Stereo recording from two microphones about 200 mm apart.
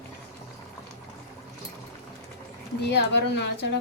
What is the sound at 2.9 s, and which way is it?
Speech, 60° left (ahead or behind).